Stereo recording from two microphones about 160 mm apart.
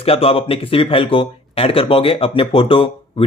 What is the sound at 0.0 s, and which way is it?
Speech, 35° left (ahead or behind).